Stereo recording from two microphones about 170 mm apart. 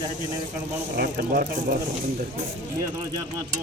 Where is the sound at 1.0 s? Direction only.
55° right (ahead or behind).